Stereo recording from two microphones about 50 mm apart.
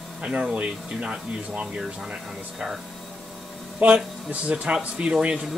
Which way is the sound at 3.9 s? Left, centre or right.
Right.